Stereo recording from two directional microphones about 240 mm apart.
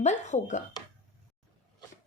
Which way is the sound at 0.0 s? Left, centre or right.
Left.